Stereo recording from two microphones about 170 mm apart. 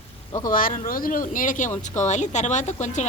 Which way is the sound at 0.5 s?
55° left (ahead or behind).